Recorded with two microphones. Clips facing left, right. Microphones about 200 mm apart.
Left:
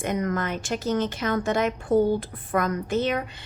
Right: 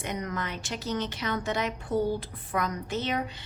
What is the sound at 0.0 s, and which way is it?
A woman's voice, 50° left (ahead or behind).